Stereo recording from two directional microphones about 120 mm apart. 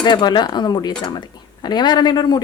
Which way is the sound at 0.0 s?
40° left (ahead or behind).